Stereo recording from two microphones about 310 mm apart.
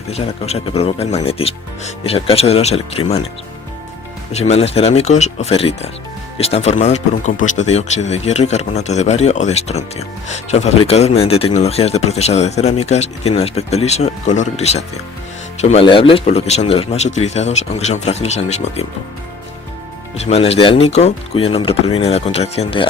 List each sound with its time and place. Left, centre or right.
0.1 s speech: centre
4.3 s speech: left
20.1 s speech: centre